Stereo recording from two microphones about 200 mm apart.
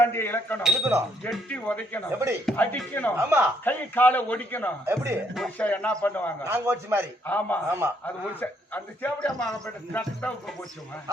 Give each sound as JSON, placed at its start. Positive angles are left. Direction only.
{"t": 0.0, "sound": "speech", "side_deg": 10}
{"t": 0.6, "sound": "a man's voice", "side_deg": 0}
{"t": 2.1, "sound": "a man's voice", "side_deg": -15}
{"t": 2.5, "sound": "a man's voice", "side_deg": 10}
{"t": 3.2, "sound": "a man's voice", "side_deg": -10}
{"t": 3.6, "sound": "a man's voice", "side_deg": 10}
{"t": 4.9, "sound": "a man's voice", "side_deg": -10}
{"t": 5.3, "sound": "a man's voice", "side_deg": 5}
{"t": 6.4, "sound": "a man's voice", "side_deg": -10}
{"t": 7.3, "sound": "a man's voice", "side_deg": 10}